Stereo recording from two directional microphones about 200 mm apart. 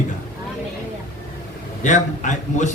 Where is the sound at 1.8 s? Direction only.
40° left (ahead or behind).